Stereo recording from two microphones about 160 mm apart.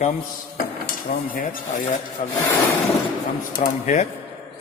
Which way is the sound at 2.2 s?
45° left (ahead or behind).